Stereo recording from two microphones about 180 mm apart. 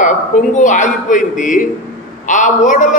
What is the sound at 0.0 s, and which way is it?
A man's voice, 45° left (ahead or behind).